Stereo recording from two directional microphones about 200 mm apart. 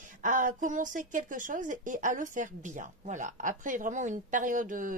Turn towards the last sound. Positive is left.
turn(degrees=-40)  # may be behind; listen again after turning